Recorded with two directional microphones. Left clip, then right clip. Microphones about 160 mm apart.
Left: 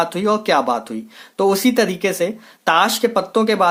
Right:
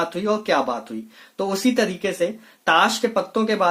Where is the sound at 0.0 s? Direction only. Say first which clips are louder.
Left 5 dB; 35° left (ahead or behind).